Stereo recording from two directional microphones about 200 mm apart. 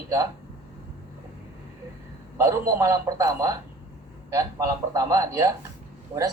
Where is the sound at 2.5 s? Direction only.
15° right (ahead or behind).